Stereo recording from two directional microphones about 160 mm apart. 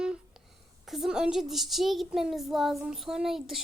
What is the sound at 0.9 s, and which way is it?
A child's voice, centre (ahead or behind).